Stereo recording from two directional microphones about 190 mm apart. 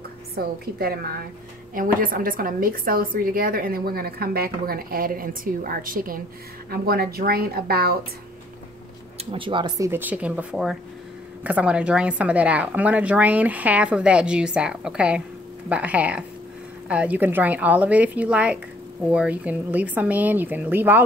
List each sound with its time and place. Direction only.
0.4 s a woman's voice: 55° right (ahead or behind)
9.2 s a woman's voice: 30° right (ahead or behind); by 21.0 s 10° right (ahead or behind)